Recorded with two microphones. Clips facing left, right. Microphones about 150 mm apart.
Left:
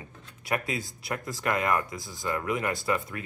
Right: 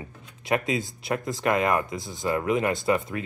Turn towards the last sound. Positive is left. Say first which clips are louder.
# right 5 dB
turn(degrees=-25)  # may be behind; listen again after turning